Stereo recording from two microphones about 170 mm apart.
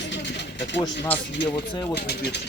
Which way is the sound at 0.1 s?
90° left.